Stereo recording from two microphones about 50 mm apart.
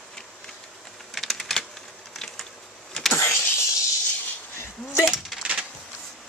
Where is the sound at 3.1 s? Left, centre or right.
Left.